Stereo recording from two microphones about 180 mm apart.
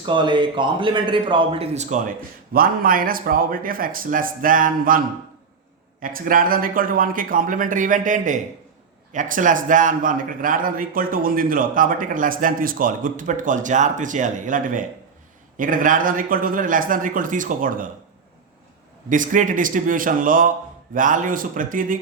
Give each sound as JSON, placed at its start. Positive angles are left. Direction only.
{"t": 0.0, "sound": "a man's voice", "side_deg": -25}
{"t": 19.0, "sound": "a man's voice", "side_deg": -45}